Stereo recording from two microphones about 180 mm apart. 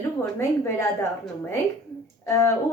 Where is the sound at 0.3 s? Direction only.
15° left (ahead or behind).